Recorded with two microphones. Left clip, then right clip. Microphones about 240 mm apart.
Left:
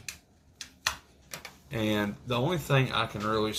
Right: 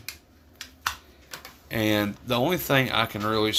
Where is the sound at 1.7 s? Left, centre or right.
Right.